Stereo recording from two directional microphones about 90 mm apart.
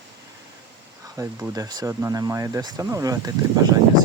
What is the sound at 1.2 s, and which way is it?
Speech, 40° right (ahead or behind).